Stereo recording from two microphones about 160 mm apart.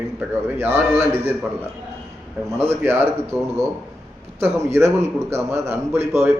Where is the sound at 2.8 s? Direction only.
15° right (ahead or behind).